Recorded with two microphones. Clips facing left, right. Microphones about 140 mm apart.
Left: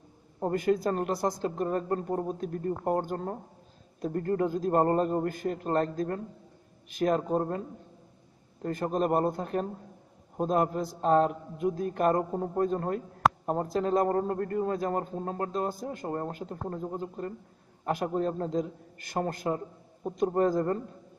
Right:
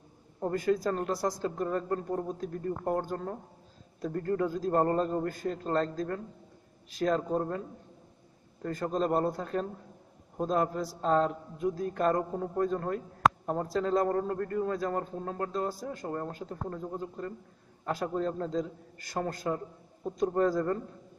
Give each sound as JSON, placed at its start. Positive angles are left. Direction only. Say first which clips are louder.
{"t": 0.4, "sound": "a man's voice", "louder": "left 2 dB", "side_deg": 25}
{"t": 4.1, "sound": "a man's voice", "louder": "left 2 dB", "side_deg": 30}
{"t": 4.5, "sound": "a man's voice", "louder": "left 3 dB", "side_deg": 20}
{"t": 8.6, "sound": "a man's voice", "louder": "left 2 dB", "side_deg": 20}
{"t": 14.1, "sound": "a man's voice", "louder": "left 2 dB", "side_deg": 30}